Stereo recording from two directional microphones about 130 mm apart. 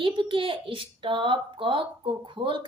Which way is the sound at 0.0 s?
40° right (ahead or behind).